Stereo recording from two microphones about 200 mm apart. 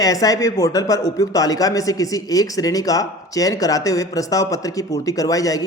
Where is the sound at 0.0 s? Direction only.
15° left (ahead or behind).